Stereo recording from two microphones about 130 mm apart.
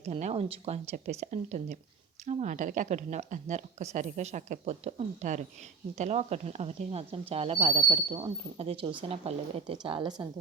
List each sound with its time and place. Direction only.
0.0 s speech: 60° right (ahead or behind); by 10.2 s 35° right (ahead or behind)